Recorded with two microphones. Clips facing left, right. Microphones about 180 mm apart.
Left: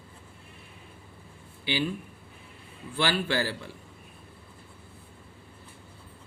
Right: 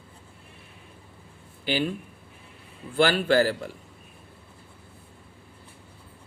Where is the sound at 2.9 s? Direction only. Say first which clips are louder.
Right 7 dB; 45° right (ahead or behind).